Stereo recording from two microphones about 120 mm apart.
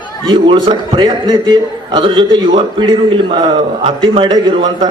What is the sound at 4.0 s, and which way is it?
Speech, 45° right (ahead or behind).